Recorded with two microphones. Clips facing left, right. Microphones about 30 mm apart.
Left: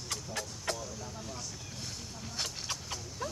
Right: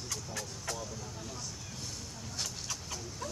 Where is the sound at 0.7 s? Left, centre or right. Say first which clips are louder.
Left 3 dB; left.